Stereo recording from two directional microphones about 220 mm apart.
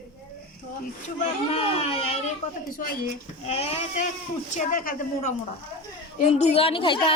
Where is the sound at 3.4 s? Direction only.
30° left (ahead or behind).